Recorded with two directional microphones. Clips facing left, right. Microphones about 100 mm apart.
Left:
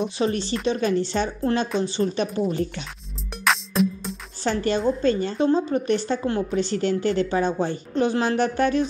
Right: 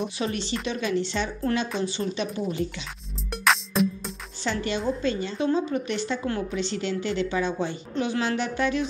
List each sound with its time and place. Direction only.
0.2 s a woman's voice: 40° left (ahead or behind)
3.3 s music: centre (ahead or behind)
4.4 s a woman's voice: 45° left (ahead or behind)